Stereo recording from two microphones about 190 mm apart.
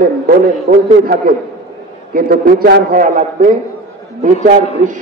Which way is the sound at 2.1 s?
50° right (ahead or behind).